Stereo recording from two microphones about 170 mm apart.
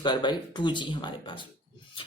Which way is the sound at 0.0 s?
25° left (ahead or behind).